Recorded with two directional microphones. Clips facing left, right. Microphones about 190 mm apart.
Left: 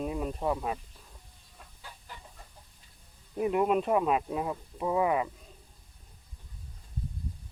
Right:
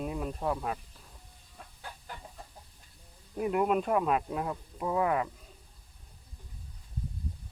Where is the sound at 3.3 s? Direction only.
Centre (ahead or behind).